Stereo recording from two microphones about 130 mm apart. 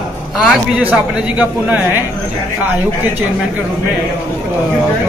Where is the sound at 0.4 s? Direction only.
5° right (ahead or behind).